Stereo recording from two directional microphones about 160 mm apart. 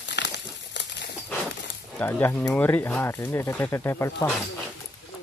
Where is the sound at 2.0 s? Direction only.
15° left (ahead or behind).